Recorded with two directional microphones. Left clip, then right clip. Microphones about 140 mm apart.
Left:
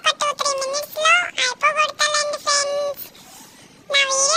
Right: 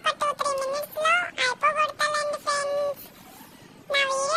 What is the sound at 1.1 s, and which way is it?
Synthetic singing, 15° left (ahead or behind).